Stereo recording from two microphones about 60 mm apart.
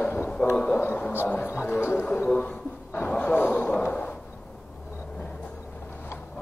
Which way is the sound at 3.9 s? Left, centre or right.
Left.